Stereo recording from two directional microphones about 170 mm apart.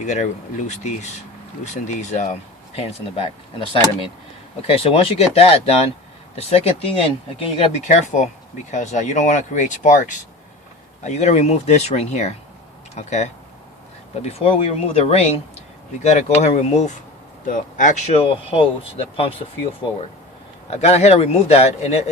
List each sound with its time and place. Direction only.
0.0 s speech: 45° left (ahead or behind)
4.6 s speech: 35° left (ahead or behind)
14.3 s speech: 35° left (ahead or behind)
20.7 s speech: 40° left (ahead or behind)